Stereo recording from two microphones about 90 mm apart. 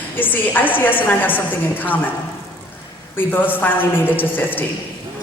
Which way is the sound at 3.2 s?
20° left (ahead or behind).